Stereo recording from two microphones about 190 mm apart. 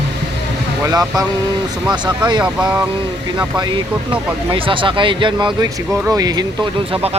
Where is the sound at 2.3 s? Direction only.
25° right (ahead or behind).